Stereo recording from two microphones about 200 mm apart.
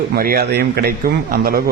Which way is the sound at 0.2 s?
50° right (ahead or behind).